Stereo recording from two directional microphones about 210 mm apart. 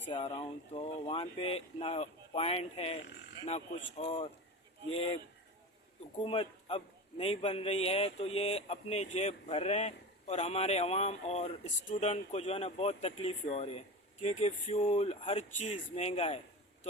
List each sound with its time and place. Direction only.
0.1 s a man's voice: 25° left (ahead or behind)
6.2 s a man's voice: 25° left (ahead or behind)